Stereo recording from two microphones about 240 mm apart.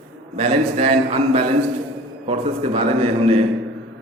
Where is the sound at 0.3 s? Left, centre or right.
Right.